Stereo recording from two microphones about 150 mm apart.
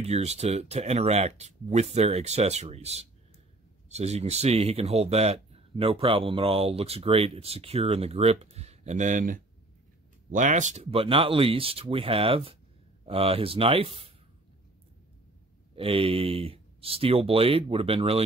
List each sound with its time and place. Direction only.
0.0 s speech: 45° right (ahead or behind)
15.7 s speech: 40° right (ahead or behind)